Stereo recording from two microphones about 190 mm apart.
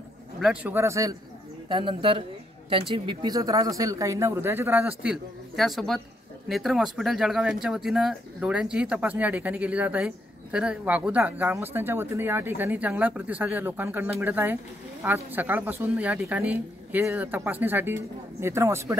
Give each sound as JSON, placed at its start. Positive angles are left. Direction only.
{"t": 0.4, "sound": "speech", "side_deg": -5}
{"t": 1.7, "sound": "speech", "side_deg": -25}